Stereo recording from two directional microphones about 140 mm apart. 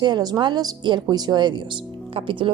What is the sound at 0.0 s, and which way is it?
A woman's voice, 30° right (ahead or behind).